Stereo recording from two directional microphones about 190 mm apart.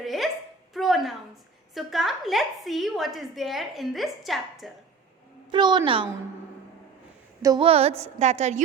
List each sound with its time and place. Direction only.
0.0 s a sound: centre (ahead or behind)
1.7 s a woman's voice: centre (ahead or behind)
5.5 s a woman's voice: 25° right (ahead or behind)
7.4 s a woman's voice: 25° right (ahead or behind)